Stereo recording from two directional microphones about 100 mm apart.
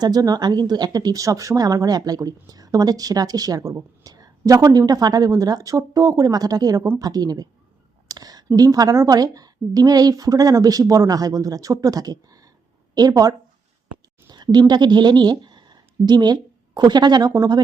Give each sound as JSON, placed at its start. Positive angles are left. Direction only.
{"t": 0.0, "sound": "speech", "side_deg": -40}
{"t": 8.0, "sound": "a sound", "side_deg": -40}
{"t": 8.5, "sound": "speech", "side_deg": -40}